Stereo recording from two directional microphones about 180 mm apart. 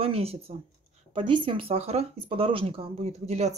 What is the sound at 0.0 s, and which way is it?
Speech, 30° right (ahead or behind).